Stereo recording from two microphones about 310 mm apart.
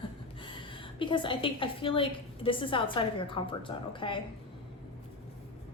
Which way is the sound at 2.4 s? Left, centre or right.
Centre.